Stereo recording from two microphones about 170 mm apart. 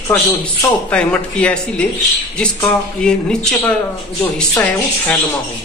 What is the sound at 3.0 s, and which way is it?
A man's voice, 5° left (ahead or behind).